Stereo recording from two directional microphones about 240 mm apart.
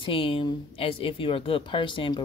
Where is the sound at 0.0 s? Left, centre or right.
Left.